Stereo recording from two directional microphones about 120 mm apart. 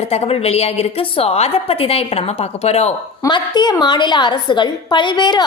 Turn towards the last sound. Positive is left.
turn(degrees=40)  # may be behind; listen again after turning